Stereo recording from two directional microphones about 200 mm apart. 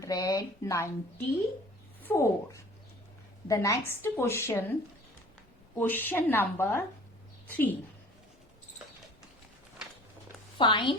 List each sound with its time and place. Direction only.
0.0 s a woman's voice: 20° left (ahead or behind)
2.0 s a woman's voice: 10° left (ahead or behind)
10.6 s a woman's voice: 25° left (ahead or behind)